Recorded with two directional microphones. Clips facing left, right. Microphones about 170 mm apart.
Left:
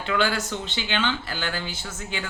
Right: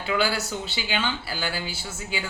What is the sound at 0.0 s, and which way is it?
Speech, 10° right (ahead or behind).